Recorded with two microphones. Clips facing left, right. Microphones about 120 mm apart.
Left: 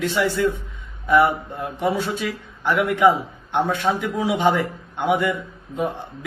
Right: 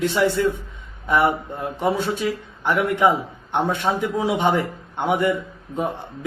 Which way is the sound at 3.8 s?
20° right (ahead or behind).